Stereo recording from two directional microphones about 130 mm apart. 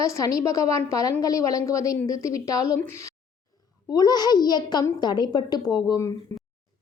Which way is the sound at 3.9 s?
30° left (ahead or behind).